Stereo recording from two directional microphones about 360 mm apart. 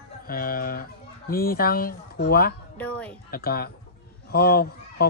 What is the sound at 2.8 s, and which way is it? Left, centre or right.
Speech, centre.